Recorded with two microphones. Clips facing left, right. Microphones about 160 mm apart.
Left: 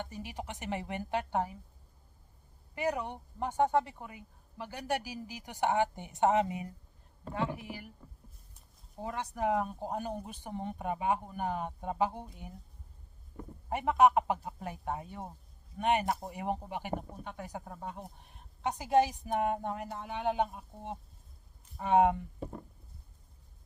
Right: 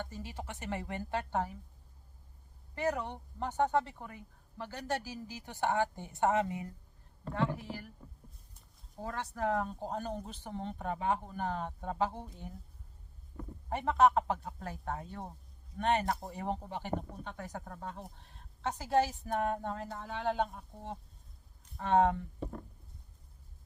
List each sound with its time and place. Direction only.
0.0 s speech: 15° left (ahead or behind)
2.7 s speech: 10° left (ahead or behind)
9.0 s speech: 15° left (ahead or behind)